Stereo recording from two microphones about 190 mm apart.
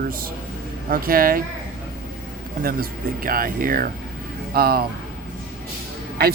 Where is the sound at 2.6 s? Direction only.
50° right (ahead or behind).